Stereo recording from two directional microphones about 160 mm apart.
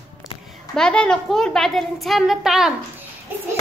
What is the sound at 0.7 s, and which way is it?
A woman's voice, 5° left (ahead or behind).